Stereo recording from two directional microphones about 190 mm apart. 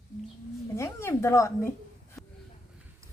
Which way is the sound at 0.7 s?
15° left (ahead or behind).